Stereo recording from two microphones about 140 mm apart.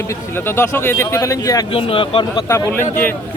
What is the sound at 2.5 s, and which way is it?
Speech, 20° left (ahead or behind).